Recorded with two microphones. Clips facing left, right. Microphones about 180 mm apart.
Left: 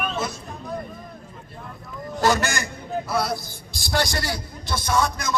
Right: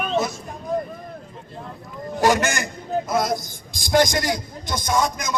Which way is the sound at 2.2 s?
15° right (ahead or behind).